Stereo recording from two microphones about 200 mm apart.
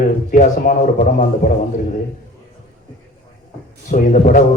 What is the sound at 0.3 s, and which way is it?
Speech, 40° left (ahead or behind).